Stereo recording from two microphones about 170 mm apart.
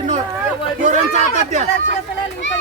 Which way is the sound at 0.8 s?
45° right (ahead or behind).